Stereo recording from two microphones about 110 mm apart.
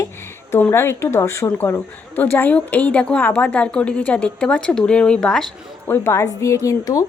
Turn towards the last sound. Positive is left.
turn(degrees=30)  # may be behind; listen again after turning